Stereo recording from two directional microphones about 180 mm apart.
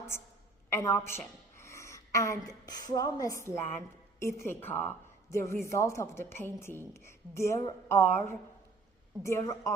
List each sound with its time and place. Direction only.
0.1 s a woman's voice: 15° left (ahead or behind)